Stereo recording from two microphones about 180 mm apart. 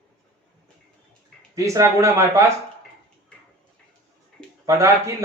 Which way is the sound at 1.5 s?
15° right (ahead or behind).